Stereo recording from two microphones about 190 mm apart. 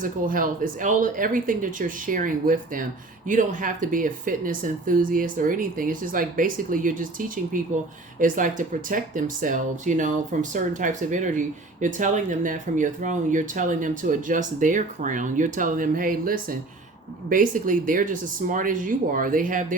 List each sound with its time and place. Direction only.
0.0 s speech: 45° right (ahead or behind)